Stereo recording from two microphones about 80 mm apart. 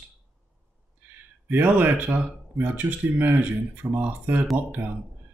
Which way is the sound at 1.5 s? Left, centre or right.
Right.